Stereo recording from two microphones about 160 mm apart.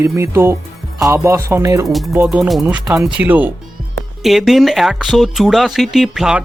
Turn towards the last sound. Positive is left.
turn(degrees=-5)  # may be behind; listen again after turning